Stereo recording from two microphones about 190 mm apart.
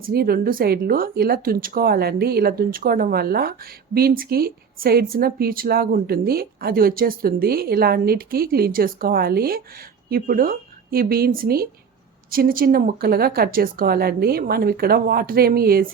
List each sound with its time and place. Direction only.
0.0 s a woman's voice: 55° right (ahead or behind)